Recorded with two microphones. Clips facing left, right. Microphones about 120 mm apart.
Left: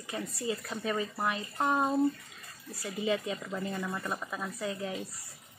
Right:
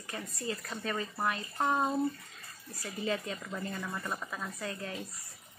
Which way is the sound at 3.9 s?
5° left (ahead or behind).